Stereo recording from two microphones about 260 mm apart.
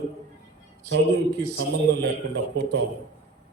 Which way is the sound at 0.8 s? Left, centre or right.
Right.